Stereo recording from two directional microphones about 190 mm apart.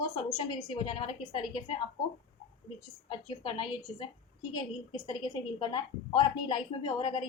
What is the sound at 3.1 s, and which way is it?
A woman's voice, 25° left (ahead or behind).